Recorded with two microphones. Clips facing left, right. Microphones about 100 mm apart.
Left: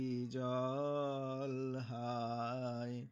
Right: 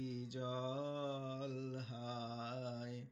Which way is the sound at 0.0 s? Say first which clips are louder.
Left 5 dB; 45° left (ahead or behind).